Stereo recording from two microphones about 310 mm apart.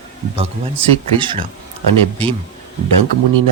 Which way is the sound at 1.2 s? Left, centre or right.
Centre.